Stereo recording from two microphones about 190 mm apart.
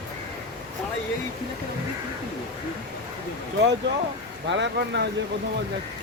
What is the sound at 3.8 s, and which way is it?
Speech, 65° right (ahead or behind).